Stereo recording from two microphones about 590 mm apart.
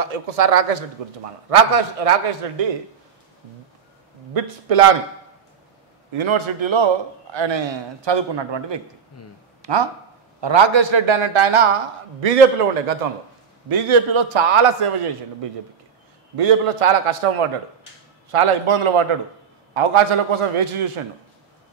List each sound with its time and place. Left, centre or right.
0.0 s a man's voice: right
4.3 s a man's voice: right
6.1 s a man's voice: right
9.6 s a sound: right
10.4 s a man's voice: right
12.2 s a man's voice: right
13.7 s a man's voice: right
16.3 s a man's voice: right